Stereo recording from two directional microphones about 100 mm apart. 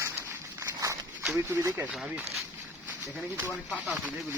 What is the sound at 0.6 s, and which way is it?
Walk, 30° right (ahead or behind).